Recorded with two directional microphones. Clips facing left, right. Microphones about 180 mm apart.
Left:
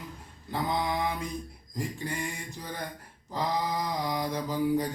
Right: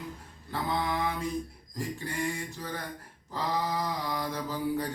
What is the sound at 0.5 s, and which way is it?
Mantra, 15° left (ahead or behind).